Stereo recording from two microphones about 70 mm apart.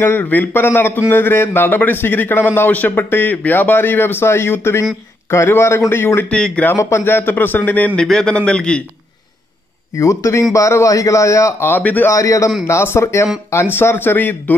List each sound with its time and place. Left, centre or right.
0.0 s a man's voice: left
6.2 s a man's voice: centre
6.6 s a man's voice: left
8.0 s a man's voice: centre
9.9 s a man's voice: left
11.7 s a man's voice: left
12.1 s a man's voice: left
12.6 s a man's voice: left